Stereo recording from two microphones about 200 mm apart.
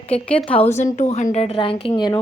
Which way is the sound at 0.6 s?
35° left (ahead or behind).